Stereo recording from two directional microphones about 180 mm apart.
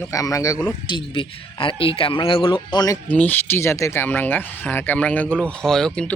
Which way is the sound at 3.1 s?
10° left (ahead or behind).